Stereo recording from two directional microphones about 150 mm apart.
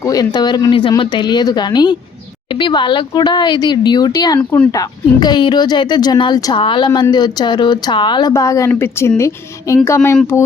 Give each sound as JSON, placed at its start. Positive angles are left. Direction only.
{"t": 0.0, "sound": "speech", "side_deg": 25}
{"t": 4.4, "sound": "speech", "side_deg": 10}
{"t": 4.7, "sound": "speech", "side_deg": 25}
{"t": 8.3, "sound": "speech", "side_deg": 20}